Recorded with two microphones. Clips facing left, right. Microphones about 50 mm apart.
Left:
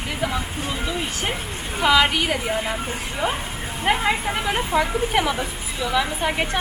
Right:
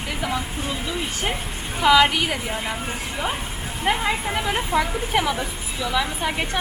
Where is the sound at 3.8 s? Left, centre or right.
Centre.